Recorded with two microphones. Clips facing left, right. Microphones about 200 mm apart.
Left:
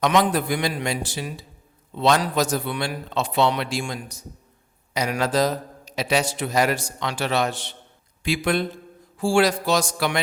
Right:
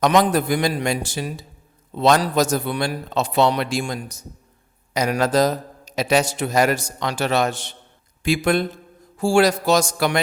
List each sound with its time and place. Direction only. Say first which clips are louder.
0.0 s a man's voice: right 3 dB; 40° right (ahead or behind)